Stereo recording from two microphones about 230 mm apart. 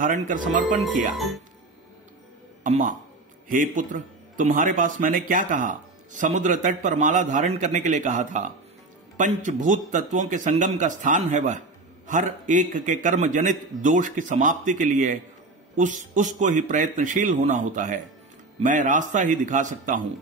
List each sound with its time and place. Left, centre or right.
0.0 s a man's voice: right
1.1 s speech: centre
2.6 s a man's voice: right